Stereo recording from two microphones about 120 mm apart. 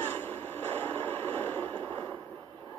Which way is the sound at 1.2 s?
15° left (ahead or behind).